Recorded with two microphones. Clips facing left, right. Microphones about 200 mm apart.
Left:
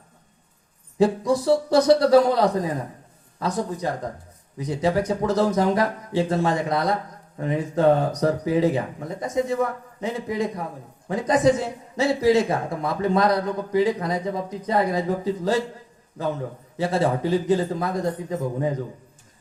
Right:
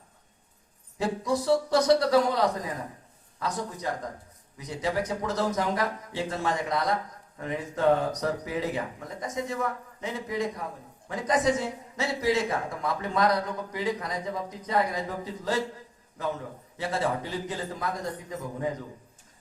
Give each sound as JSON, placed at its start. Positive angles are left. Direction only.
{"t": 0.9, "sound": "speech", "side_deg": 30}
{"t": 16.7, "sound": "speech", "side_deg": 30}